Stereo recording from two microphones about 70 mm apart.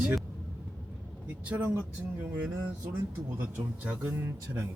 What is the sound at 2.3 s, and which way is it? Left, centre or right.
Speech, centre.